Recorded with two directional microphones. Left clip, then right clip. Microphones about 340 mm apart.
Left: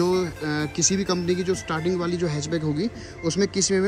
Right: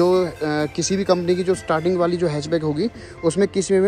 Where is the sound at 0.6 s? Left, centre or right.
Centre.